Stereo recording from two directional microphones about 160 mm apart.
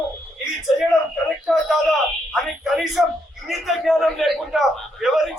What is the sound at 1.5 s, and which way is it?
A man's voice, centre (ahead or behind).